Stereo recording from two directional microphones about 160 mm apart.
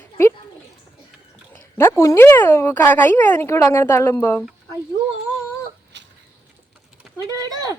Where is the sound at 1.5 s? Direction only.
15° left (ahead or behind).